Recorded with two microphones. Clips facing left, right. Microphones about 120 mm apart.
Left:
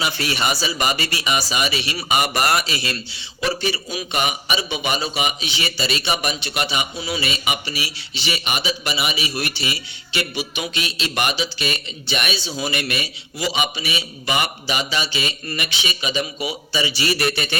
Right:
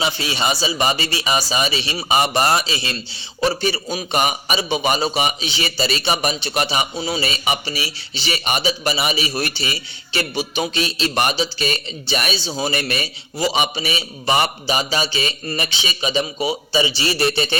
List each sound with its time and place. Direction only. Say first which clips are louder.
0.0 s speech: right 1 dB; 25° right (ahead or behind)
3.4 s a man's voice: right 3 dB; 35° right (ahead or behind)